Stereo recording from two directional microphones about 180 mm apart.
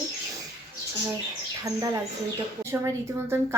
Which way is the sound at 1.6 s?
15° right (ahead or behind).